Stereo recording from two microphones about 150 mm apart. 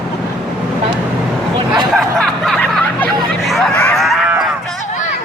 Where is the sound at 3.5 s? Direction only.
5° left (ahead or behind).